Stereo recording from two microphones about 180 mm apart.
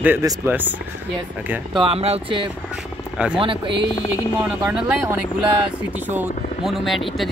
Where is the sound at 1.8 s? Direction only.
35° right (ahead or behind).